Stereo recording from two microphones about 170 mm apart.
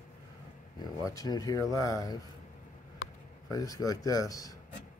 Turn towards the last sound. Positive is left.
turn(degrees=20)  # may be behind; listen again after turning